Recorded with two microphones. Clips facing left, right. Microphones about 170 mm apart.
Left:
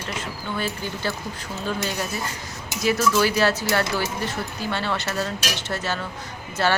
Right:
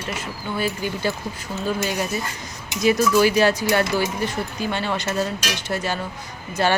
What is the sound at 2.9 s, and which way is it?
Speech, 15° right (ahead or behind).